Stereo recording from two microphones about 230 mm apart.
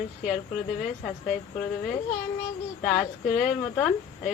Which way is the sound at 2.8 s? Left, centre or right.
Centre.